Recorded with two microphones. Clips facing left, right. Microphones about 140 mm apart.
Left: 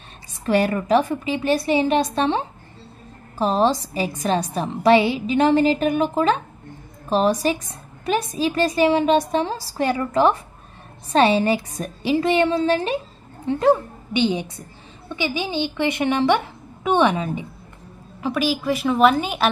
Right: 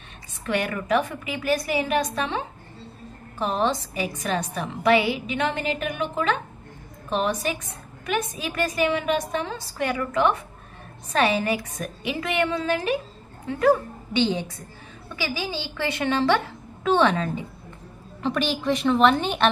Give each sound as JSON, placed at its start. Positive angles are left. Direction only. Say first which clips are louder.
{"t": 0.5, "sound": "a woman's voice", "louder": "left 6 dB", "side_deg": 35}